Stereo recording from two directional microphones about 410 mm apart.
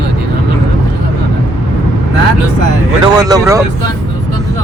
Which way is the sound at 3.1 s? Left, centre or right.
Centre.